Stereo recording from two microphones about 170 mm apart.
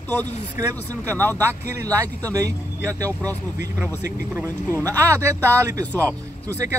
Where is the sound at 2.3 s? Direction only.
20° right (ahead or behind).